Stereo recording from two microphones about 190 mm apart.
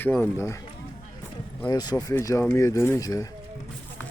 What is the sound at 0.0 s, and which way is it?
Speech, 10° left (ahead or behind).